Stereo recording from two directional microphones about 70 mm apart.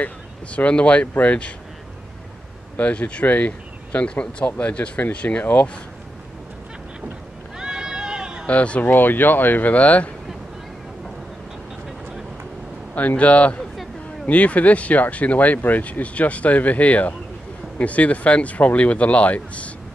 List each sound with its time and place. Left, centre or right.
0.0 s speech: centre
2.8 s speech: centre
7.5 s a sound: centre
8.5 s speech: centre
12.9 s speech: left